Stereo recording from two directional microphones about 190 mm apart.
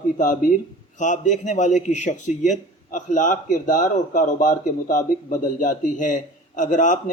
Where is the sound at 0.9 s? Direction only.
40° left (ahead or behind).